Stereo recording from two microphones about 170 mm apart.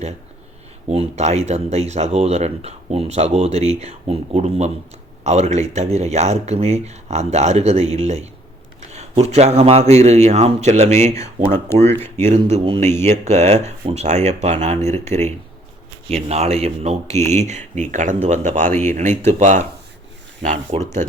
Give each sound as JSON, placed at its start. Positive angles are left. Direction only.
{"t": 0.9, "sound": "speech", "side_deg": -40}
{"t": 16.1, "sound": "speech", "side_deg": -40}
{"t": 20.7, "sound": "speech", "side_deg": -45}